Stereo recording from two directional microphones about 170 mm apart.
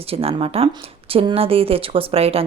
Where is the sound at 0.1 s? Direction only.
35° right (ahead or behind).